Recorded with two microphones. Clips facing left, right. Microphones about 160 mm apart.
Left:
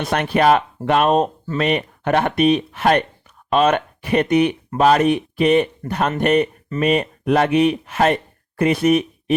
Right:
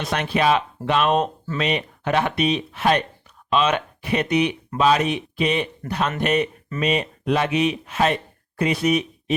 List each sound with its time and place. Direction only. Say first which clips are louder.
0.0 s speech: left 4 dB; 55° left (ahead or behind); by 1.6 s 40° left (ahead or behind)
1.6 s speech: left 4 dB; 50° left (ahead or behind)